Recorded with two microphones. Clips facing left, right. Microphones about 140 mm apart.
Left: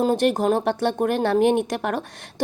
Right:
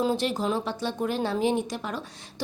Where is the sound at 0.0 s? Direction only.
55° left (ahead or behind).